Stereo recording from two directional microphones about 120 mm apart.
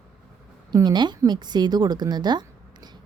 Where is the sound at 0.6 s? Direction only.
35° right (ahead or behind).